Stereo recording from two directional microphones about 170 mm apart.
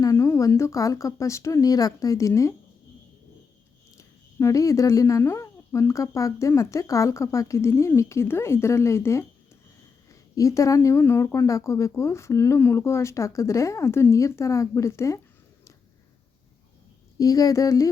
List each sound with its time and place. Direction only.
0.0 s speech: 15° left (ahead or behind)
3.9 s speech: 15° left (ahead or behind)
17.2 s speech: 20° left (ahead or behind)